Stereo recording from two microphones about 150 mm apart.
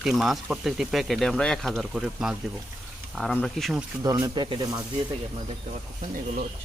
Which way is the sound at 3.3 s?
Centre (ahead or behind).